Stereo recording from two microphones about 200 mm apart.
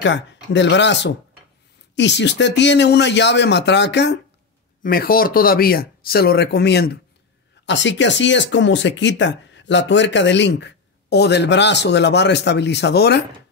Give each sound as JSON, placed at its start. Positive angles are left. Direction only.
{"t": 0.0, "sound": "speech", "side_deg": 60}
{"t": 4.8, "sound": "speech", "side_deg": 45}